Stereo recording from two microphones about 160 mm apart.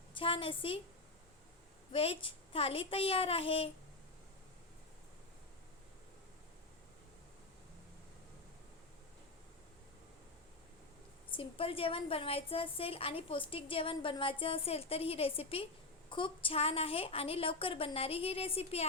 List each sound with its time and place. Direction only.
0.1 s a woman's voice: 35° left (ahead or behind)
1.9 s a woman's voice: 35° left (ahead or behind)
11.3 s a woman's voice: 35° left (ahead or behind)